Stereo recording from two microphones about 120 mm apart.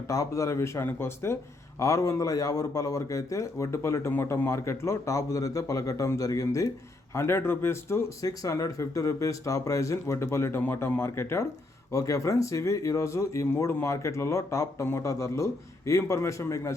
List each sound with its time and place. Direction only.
0.1 s a man's voice: 25° left (ahead or behind)